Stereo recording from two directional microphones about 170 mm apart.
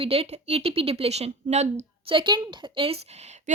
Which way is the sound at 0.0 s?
35° right (ahead or behind).